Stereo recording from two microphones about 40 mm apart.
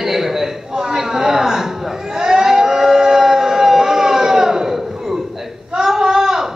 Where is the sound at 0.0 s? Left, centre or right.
Centre.